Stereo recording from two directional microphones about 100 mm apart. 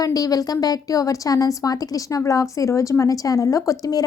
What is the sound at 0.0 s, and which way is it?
A woman's voice, 40° left (ahead or behind).